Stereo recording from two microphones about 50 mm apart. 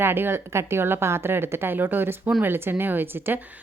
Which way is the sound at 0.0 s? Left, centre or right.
Right.